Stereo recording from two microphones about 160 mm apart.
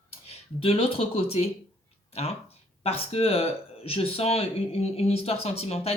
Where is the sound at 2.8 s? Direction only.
40° left (ahead or behind).